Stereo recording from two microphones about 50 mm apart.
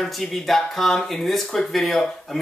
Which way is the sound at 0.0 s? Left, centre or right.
Centre.